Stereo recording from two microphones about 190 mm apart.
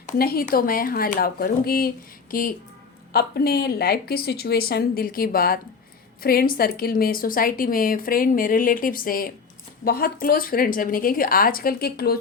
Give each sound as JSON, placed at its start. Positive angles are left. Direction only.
{"t": 0.0, "sound": "a woman's voice", "side_deg": 50}